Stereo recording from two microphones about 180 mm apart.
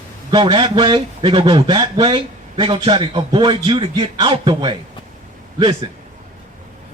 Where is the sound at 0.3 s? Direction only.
25° right (ahead or behind).